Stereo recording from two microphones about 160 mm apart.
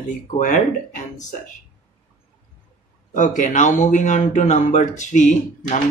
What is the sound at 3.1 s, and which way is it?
Speech, 55° left (ahead or behind).